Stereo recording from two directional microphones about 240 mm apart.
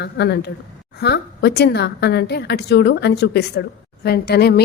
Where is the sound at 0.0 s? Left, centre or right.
Left.